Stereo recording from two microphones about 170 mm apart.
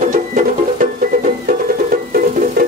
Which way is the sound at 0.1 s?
50° right (ahead or behind).